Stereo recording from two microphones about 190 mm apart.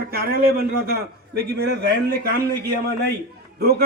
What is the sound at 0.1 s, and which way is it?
A man's voice, 50° right (ahead or behind).